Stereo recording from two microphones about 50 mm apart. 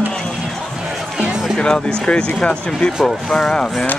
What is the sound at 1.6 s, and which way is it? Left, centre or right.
Speech, centre.